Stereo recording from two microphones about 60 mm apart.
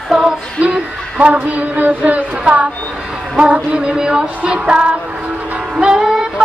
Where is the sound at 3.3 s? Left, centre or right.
Centre.